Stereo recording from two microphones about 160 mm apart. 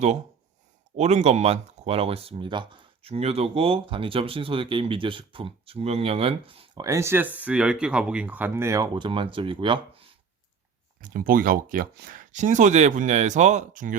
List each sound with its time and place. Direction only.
0.9 s speech: 45° right (ahead or behind)
6.8 s speech: 20° right (ahead or behind)
11.0 s speech: 60° right (ahead or behind)